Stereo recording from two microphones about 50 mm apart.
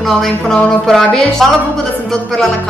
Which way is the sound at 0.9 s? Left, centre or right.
Centre.